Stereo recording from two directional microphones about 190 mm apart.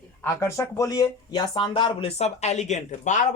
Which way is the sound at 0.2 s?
15° left (ahead or behind).